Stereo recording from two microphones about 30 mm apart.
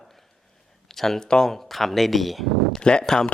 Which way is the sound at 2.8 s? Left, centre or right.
Left.